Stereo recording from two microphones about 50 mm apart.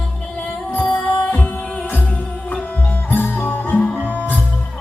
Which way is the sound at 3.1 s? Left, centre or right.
Left.